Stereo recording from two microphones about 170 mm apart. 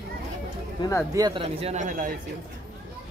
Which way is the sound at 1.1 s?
25° right (ahead or behind).